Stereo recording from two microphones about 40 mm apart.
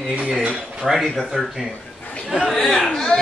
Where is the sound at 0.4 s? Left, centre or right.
Right.